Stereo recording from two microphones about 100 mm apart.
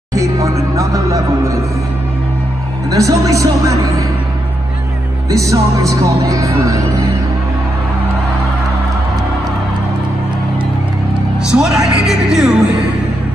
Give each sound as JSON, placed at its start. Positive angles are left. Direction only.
{"t": 0.1, "sound": "music", "side_deg": -35}
{"t": 2.9, "sound": "speech", "side_deg": -35}
{"t": 5.3, "sound": "speech", "side_deg": -35}
{"t": 11.5, "sound": "speech", "side_deg": -5}